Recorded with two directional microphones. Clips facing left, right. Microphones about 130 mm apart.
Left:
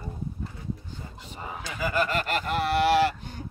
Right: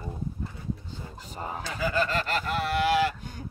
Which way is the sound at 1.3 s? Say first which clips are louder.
Right 3 dB; 40° right (ahead or behind).